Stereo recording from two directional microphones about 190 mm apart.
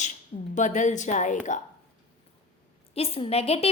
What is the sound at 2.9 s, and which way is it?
Speech, 30° left (ahead or behind).